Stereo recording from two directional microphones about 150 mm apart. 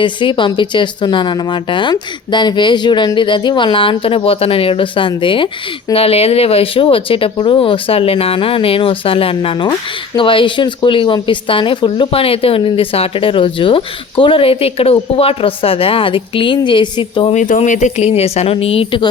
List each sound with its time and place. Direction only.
0.0 s speech: 30° left (ahead or behind)
17.3 s speech: 55° left (ahead or behind); by 19.0 s 35° left (ahead or behind)